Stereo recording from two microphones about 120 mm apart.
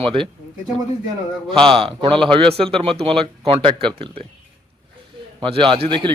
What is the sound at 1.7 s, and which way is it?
Speech, 50° right (ahead or behind).